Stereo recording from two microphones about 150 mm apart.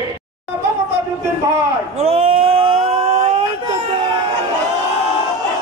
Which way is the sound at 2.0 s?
40° right (ahead or behind).